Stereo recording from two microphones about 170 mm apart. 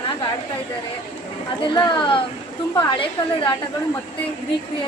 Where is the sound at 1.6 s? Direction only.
30° left (ahead or behind).